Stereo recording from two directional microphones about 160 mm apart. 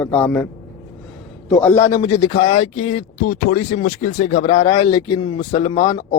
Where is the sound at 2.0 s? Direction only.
35° left (ahead or behind).